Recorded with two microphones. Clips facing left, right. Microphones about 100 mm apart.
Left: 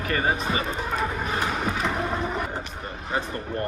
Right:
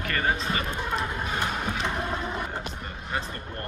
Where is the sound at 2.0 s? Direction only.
5° left (ahead or behind).